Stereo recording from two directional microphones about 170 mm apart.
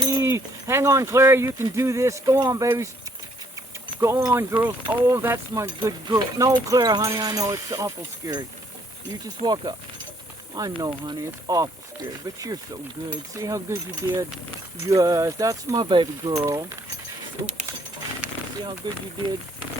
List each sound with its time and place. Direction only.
0.0 s speech: 20° right (ahead or behind)
4.0 s speech: 20° right (ahead or behind)
18.2 s a sound: 10° right (ahead or behind)
18.8 s speech: 25° right (ahead or behind)